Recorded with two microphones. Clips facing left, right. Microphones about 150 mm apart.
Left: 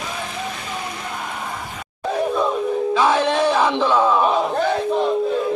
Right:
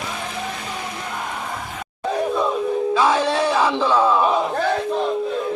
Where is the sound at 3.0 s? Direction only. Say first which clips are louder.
Left 2 dB; 10° right (ahead or behind).